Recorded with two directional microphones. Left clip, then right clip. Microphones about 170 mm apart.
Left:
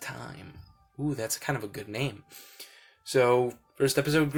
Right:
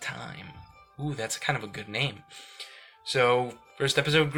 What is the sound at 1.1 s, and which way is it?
Speech, 55° left (ahead or behind).